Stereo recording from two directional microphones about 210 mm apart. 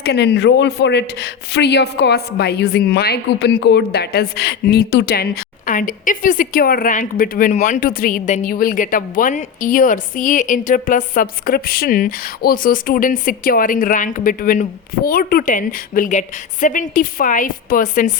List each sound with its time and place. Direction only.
0.0 s speech: 50° left (ahead or behind)